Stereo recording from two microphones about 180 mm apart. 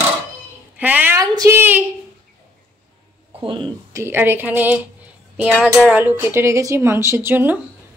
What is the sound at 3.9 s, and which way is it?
A woman's voice, 15° right (ahead or behind).